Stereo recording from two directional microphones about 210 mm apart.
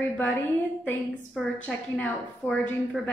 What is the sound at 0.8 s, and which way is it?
A woman's voice, 5° left (ahead or behind).